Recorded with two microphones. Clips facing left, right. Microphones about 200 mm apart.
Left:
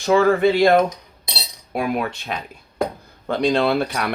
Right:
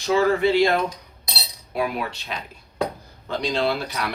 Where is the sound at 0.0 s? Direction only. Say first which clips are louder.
Left 4 dB; 55° left (ahead or behind).